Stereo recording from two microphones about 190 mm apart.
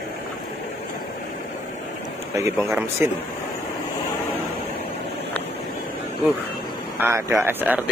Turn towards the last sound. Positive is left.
turn(degrees=-10)  # may be behind; listen again after turning